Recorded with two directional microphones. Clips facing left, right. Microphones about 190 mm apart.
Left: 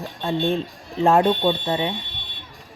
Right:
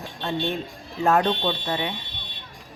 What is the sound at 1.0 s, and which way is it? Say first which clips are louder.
Speech: left 4 dB; 30° left (ahead or behind).